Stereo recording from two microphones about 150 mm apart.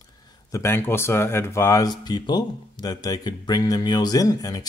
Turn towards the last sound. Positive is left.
turn(degrees=25)  # may be behind; listen again after turning